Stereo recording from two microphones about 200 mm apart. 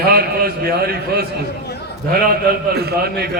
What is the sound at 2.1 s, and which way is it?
A man's voice, 50° right (ahead or behind).